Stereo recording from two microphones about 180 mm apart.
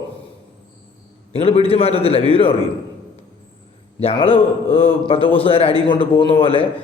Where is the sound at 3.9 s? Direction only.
30° left (ahead or behind).